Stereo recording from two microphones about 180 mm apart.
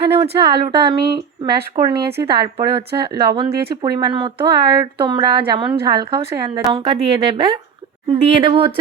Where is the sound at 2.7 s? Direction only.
30° right (ahead or behind).